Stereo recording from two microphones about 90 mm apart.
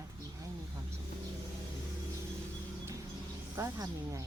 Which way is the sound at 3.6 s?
35° right (ahead or behind).